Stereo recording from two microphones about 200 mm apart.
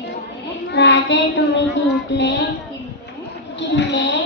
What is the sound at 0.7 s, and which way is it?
Child singing, 60° left (ahead or behind).